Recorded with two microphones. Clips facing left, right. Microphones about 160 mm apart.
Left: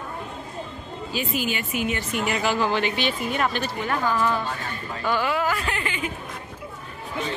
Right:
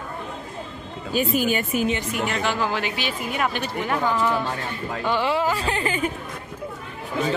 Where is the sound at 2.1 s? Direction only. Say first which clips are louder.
Even; 5° left (ahead or behind); by 6.1 s 40° right (ahead or behind).